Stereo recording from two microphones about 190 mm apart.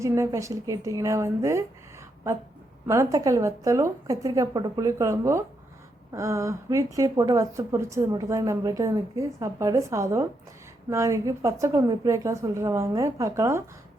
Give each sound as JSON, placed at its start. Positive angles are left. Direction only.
{"t": 0.0, "sound": "a woman's voice", "side_deg": -15}
{"t": 2.8, "sound": "a woman's voice", "side_deg": -15}